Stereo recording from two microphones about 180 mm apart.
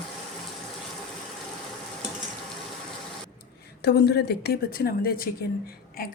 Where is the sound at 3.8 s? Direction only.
65° left (ahead or behind).